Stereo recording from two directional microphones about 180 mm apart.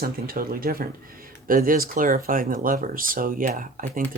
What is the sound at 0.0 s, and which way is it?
Speech, 55° right (ahead or behind).